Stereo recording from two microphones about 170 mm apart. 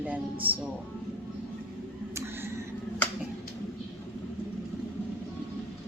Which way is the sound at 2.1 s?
15° right (ahead or behind).